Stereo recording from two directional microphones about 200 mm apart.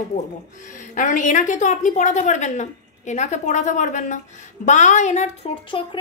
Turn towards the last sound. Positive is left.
turn(degrees=25)  # may be behind; listen again after turning